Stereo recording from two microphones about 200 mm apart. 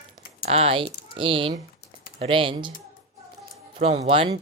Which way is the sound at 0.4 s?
30° right (ahead or behind).